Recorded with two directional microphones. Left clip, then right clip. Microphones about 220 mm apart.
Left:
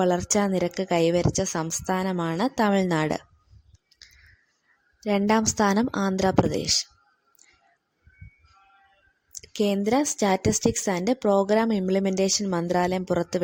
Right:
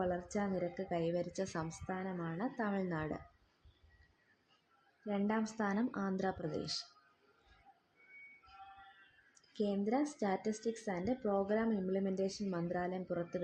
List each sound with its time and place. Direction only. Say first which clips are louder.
0.0 s a woman's voice: left 15 dB; 45° left (ahead or behind)
5.0 s a woman's voice: left 15 dB; 45° left (ahead or behind)
9.3 s a woman's voice: left 13 dB; 40° left (ahead or behind)